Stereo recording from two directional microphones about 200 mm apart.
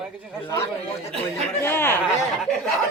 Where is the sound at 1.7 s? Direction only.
10° left (ahead or behind).